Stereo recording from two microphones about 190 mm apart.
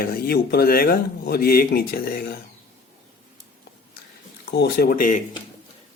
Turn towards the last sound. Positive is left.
turn(degrees=50)  # may be behind; listen again after turning